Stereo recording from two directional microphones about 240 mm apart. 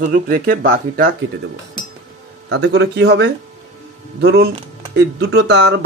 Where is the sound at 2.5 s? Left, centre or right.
Right.